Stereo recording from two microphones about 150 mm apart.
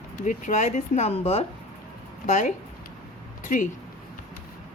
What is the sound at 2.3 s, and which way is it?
Speech, 55° left (ahead or behind).